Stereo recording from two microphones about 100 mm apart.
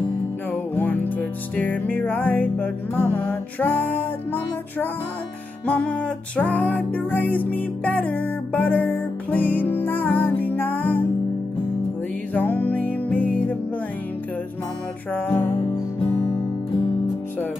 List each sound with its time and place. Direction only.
0.5 s music: 15° left (ahead or behind)
12.4 s music: 20° left (ahead or behind)
15.1 s music: 20° left (ahead or behind)